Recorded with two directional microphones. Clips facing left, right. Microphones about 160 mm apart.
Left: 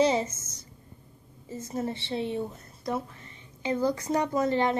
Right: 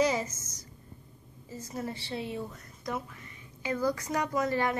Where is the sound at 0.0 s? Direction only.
25° left (ahead or behind).